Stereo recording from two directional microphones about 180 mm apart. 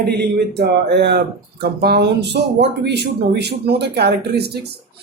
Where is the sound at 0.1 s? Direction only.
65° right (ahead or behind).